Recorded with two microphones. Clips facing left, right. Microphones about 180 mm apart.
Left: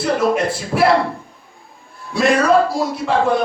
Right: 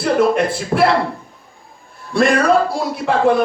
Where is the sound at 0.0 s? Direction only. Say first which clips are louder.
Right 2 dB; 55° right (ahead or behind).